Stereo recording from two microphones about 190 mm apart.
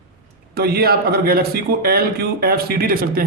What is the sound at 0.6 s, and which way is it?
Speech, 55° right (ahead or behind).